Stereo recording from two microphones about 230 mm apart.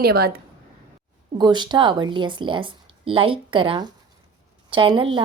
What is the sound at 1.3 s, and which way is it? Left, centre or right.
Speech, centre.